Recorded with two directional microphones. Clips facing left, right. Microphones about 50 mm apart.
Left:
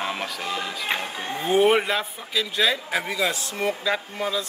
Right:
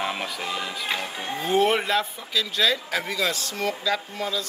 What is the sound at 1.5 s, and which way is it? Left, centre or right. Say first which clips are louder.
A man's voice: left 2 dB; centre.